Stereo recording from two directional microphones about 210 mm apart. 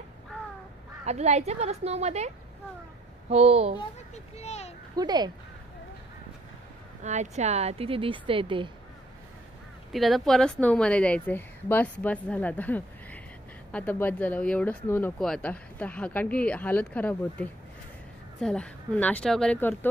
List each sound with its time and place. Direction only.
1.0 s a woman's voice: 30° right (ahead or behind)
4.1 s a child's voice: 30° left (ahead or behind)
4.9 s a woman's voice: 20° right (ahead or behind)
7.0 s a woman's voice: 35° right (ahead or behind)
9.9 s a woman's voice: centre (ahead or behind)